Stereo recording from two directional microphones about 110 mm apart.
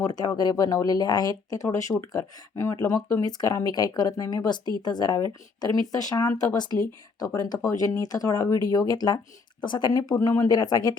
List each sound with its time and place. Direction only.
0.0 s speech: 35° left (ahead or behind)
10.0 s speech: 30° left (ahead or behind)